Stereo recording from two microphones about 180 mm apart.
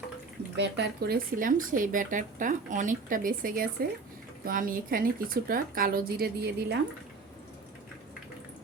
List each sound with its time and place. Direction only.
0.5 s speech: 70° right (ahead or behind)